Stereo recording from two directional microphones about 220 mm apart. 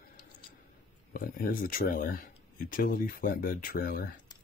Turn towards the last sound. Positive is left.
turn(degrees=40)  # may be behind; listen again after turning